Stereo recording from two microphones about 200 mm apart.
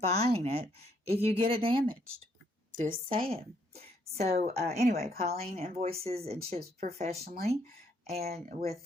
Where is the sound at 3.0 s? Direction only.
30° right (ahead or behind).